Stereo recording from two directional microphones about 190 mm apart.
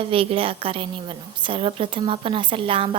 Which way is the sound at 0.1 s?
30° right (ahead or behind).